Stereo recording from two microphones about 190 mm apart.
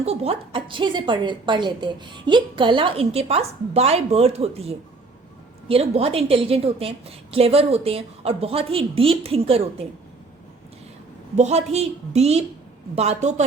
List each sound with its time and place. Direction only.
0.0 s a woman's voice: 30° right (ahead or behind)
11.3 s a woman's voice: 35° right (ahead or behind)